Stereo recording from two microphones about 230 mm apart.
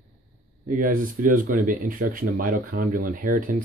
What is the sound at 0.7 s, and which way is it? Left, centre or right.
Speech, right.